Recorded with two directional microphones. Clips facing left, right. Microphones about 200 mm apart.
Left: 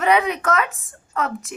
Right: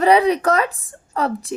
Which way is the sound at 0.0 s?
35° right (ahead or behind).